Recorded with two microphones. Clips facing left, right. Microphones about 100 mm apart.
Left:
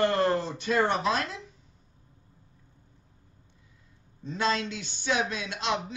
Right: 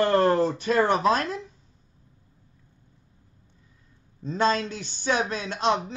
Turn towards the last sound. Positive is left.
turn(degrees=-40)  # may be behind; listen again after turning